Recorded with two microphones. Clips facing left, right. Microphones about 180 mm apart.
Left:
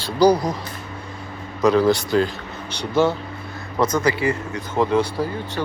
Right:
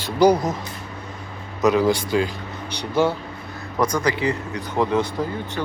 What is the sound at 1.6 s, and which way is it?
Speech, 15° right (ahead or behind).